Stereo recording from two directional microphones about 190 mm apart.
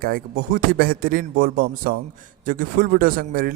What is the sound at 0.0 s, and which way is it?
A man's voice, 50° right (ahead or behind).